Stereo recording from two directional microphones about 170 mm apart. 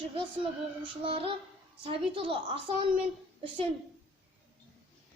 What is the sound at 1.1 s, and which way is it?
A child's voice, 30° right (ahead or behind).